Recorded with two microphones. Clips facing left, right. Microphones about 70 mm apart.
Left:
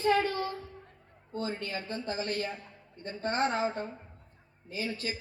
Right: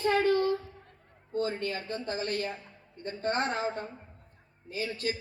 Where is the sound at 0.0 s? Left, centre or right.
Right.